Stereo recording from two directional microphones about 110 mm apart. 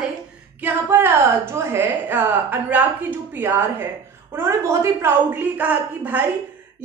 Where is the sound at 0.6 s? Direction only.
20° right (ahead or behind).